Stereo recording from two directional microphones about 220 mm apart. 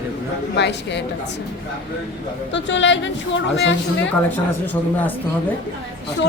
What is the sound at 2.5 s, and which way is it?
A woman's voice, 55° left (ahead or behind).